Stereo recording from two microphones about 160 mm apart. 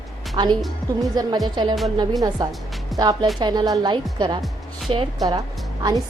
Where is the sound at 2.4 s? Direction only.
25° right (ahead or behind).